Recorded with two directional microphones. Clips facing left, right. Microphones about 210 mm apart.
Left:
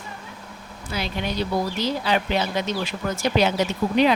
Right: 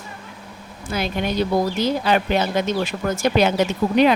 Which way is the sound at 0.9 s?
50° right (ahead or behind).